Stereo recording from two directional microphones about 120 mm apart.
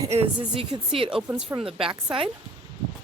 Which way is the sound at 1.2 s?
45° right (ahead or behind).